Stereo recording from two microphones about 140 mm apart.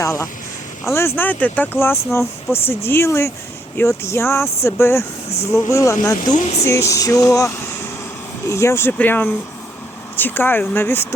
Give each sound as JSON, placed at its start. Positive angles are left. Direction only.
{"t": 0.0, "sound": "speech", "side_deg": 20}
{"t": 6.3, "sound": "speech", "side_deg": 55}
{"t": 6.7, "sound": "speech", "side_deg": 20}